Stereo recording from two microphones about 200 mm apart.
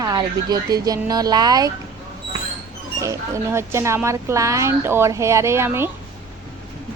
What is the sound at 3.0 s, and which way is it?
A woman's voice, 15° right (ahead or behind).